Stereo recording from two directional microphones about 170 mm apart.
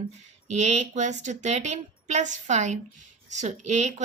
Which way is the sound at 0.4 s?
40° right (ahead or behind).